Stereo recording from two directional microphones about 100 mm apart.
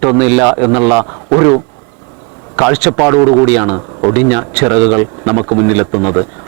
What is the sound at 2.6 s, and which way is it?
A man's voice, 15° right (ahead or behind).